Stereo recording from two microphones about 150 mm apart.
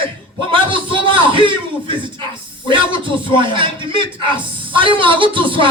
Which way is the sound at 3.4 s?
35° right (ahead or behind).